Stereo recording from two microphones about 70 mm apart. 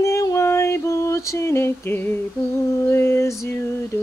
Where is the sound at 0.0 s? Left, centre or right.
Left.